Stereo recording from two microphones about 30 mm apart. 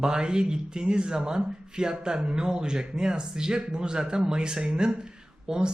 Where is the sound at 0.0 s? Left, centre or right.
Right.